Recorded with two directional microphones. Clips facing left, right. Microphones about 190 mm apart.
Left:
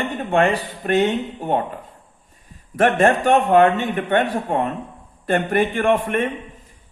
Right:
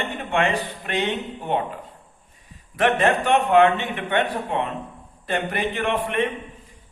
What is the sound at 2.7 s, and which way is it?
A man's voice, 45° left (ahead or behind).